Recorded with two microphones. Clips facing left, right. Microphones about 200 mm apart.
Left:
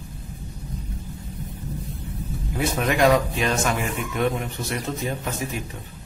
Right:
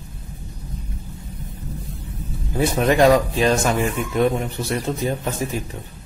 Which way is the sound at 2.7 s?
35° right (ahead or behind).